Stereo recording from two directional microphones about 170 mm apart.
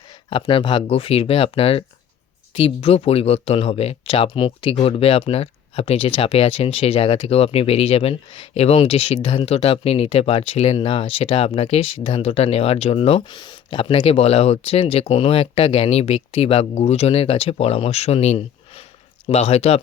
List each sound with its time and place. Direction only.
0.3 s speech: 30° left (ahead or behind)